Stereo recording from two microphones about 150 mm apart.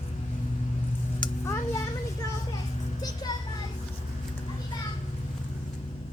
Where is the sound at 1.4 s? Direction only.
20° left (ahead or behind).